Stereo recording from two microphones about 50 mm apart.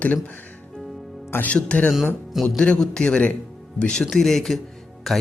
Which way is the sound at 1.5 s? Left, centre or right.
Left.